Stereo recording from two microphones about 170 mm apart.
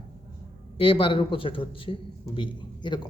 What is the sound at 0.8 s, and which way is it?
A man's voice, 30° left (ahead or behind).